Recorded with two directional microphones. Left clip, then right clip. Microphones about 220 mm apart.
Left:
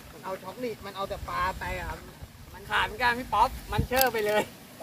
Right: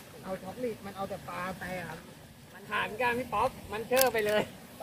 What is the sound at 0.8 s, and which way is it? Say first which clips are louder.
Speech: left 4 dB; 40° left (ahead or behind).